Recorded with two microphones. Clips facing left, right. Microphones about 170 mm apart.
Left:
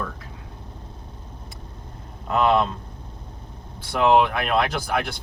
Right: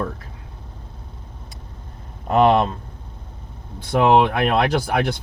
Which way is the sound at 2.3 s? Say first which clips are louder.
Right 4 dB; 40° right (ahead or behind).